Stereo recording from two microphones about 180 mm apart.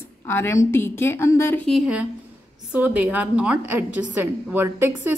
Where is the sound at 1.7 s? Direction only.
5° right (ahead or behind).